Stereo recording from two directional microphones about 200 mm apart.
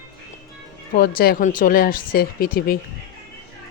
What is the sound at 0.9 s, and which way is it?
A woman's voice, 45° left (ahead or behind).